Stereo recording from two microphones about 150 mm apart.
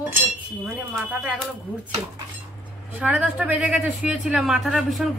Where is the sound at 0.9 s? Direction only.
5° right (ahead or behind).